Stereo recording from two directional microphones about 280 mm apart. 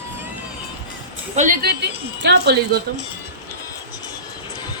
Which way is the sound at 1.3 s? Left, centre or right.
Right.